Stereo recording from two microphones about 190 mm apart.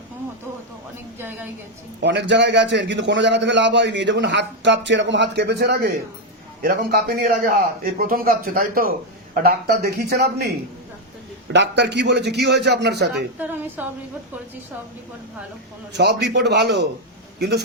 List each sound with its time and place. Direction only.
1.2 s a woman's voice: 10° right (ahead or behind)
2.0 s a man's voice: 65° right (ahead or behind)
11.5 s a man's voice: 65° right (ahead or behind)
13.4 s a woman's voice: 10° right (ahead or behind)
15.9 s a man's voice: 60° right (ahead or behind)